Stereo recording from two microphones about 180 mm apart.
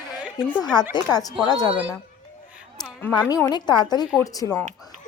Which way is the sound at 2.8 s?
10° left (ahead or behind).